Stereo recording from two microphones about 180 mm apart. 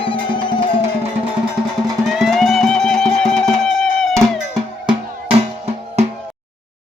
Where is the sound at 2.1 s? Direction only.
Centre (ahead or behind).